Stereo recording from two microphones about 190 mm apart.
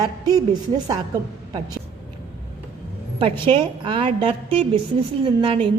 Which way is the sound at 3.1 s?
25° right (ahead or behind).